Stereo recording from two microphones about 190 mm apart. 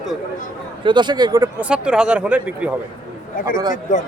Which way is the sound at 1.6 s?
5° right (ahead or behind).